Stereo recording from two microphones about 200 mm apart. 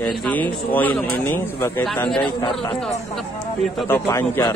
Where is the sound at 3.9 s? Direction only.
15° left (ahead or behind).